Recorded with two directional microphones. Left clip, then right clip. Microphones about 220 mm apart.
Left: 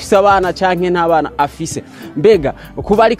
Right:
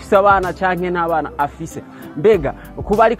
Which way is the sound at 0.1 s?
40° left (ahead or behind).